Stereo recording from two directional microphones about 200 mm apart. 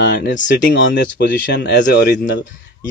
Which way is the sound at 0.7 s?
55° left (ahead or behind).